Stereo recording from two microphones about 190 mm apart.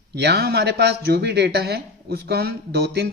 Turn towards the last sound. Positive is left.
turn(degrees=-55)  # may be behind; listen again after turning